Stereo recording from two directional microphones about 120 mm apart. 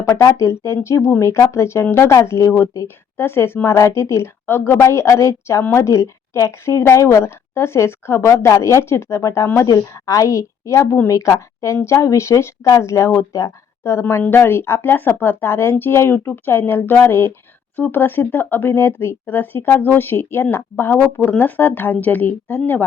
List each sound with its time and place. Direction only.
0.0 s a woman's voice: 20° left (ahead or behind)